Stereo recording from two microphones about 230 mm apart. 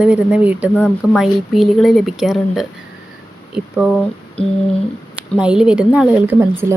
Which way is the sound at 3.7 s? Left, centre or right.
Centre.